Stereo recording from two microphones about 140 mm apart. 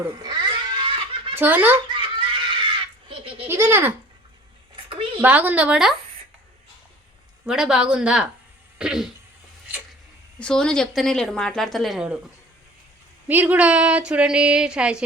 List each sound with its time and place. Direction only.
0.2 s cat: 30° right (ahead or behind)
1.4 s speech: 15° right (ahead or behind)
1.9 s giggle: 35° right (ahead or behind)
3.1 s baby laughter: 40° right (ahead or behind)
3.4 s speech: 15° right (ahead or behind)
4.9 s a sound: 40° right (ahead or behind)
5.2 s speech: 10° right (ahead or behind)
7.4 s a woman's voice: 5° right (ahead or behind)
10.4 s a woman's voice: 5° left (ahead or behind)
13.2 s speech: 10° right (ahead or behind)